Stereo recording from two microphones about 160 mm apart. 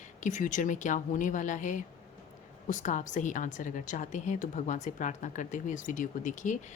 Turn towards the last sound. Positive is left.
turn(degrees=50)  # may be behind; listen again after turning